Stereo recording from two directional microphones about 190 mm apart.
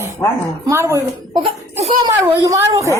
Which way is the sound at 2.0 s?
15° right (ahead or behind).